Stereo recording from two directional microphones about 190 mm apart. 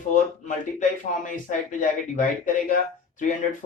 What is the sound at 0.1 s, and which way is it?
Speech, 40° left (ahead or behind).